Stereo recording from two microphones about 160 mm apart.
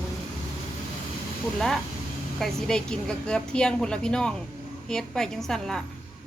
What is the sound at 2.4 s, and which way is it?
A woman's voice, centre (ahead or behind).